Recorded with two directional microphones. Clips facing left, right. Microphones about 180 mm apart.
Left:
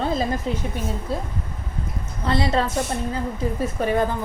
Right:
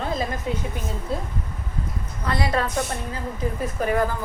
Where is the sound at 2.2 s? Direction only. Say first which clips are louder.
Left 3 dB; 25° left (ahead or behind).